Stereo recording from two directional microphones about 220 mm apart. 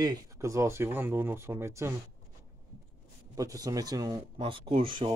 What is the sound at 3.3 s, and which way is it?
Speech, 15° right (ahead or behind).